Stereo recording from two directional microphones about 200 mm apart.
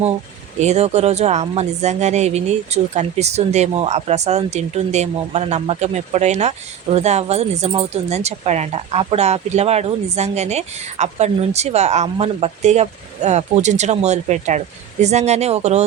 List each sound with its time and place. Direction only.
0.6 s speech: 35° right (ahead or behind)